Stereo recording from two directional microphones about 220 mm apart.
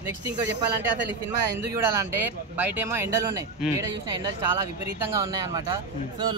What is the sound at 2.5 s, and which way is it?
Speech, 10° right (ahead or behind).